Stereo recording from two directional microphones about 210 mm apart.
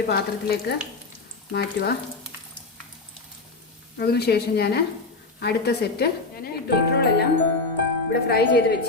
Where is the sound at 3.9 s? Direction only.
50° left (ahead or behind).